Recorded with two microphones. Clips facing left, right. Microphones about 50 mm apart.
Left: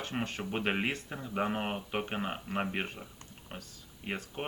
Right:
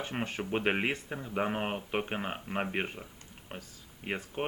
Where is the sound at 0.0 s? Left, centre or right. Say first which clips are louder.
Right 1 dB; centre.